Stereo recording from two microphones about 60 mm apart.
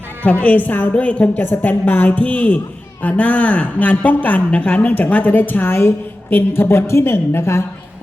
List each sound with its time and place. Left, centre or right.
0.4 s speech: left
1.5 s a woman's voice: left